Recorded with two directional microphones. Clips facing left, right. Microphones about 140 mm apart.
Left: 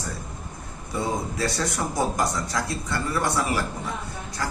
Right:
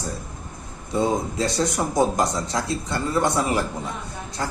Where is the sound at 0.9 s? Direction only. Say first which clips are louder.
Right 5 dB; 20° right (ahead or behind).